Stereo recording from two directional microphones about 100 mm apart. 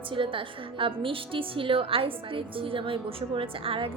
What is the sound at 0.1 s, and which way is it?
A woman's voice, 60° right (ahead or behind).